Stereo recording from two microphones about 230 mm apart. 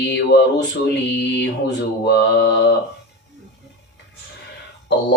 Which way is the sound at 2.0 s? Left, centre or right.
Left.